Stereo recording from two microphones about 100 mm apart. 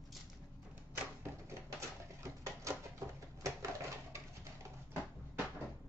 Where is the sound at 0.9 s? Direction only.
25° right (ahead or behind).